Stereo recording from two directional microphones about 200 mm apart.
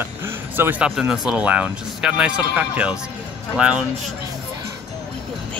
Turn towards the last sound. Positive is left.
turn(degrees=-5)  # may be behind; listen again after turning